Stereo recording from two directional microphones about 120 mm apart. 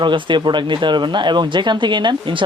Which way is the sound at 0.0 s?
40° right (ahead or behind).